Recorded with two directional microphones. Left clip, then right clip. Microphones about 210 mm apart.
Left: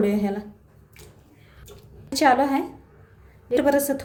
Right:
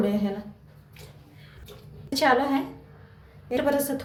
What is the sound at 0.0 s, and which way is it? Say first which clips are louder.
Speech: left 3 dB; 50° left (ahead or behind).